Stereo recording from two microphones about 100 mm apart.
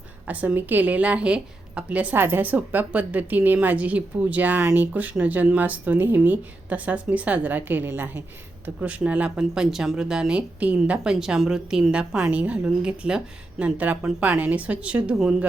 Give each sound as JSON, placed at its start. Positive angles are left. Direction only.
{"t": 0.3, "sound": "a woman's voice", "side_deg": -15}